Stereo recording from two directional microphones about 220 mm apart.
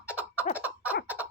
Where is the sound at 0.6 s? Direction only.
5° right (ahead or behind).